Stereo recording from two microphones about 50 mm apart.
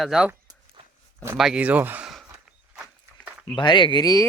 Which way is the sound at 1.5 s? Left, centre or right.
Right.